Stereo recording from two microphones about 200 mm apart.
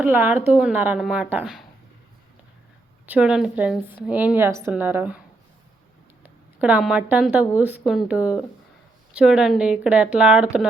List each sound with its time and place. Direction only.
0.0 s a woman's voice: 10° right (ahead or behind)
3.1 s a woman's voice: 5° right (ahead or behind)
6.2 s a woman's voice: 5° right (ahead or behind)